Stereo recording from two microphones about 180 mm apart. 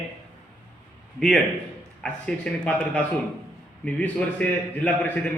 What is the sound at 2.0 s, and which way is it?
A man's voice, 5° left (ahead or behind).